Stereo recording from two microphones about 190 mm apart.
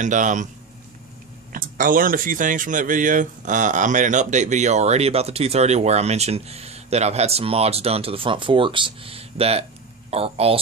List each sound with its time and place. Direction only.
0.0 s speech: 40° right (ahead or behind)
1.5 s speech: 45° right (ahead or behind); by 10.6 s 30° right (ahead or behind)